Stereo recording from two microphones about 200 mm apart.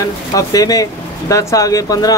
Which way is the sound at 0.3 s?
20° left (ahead or behind).